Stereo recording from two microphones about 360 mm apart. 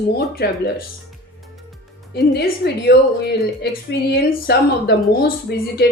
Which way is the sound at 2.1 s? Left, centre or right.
Left.